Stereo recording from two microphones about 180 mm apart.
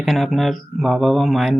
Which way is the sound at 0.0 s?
Centre (ahead or behind).